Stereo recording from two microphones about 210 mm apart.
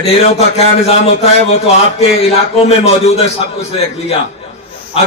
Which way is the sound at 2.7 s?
30° left (ahead or behind).